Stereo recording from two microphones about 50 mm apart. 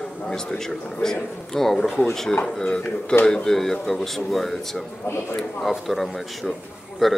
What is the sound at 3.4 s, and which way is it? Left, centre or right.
A man's voice, centre.